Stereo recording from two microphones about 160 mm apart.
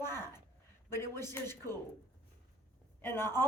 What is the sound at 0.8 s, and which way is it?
Speech, 15° left (ahead or behind).